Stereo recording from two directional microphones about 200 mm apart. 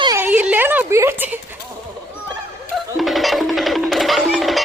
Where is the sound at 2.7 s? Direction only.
Centre (ahead or behind).